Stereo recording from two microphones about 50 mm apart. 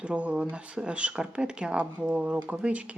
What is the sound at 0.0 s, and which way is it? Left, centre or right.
Speech, right.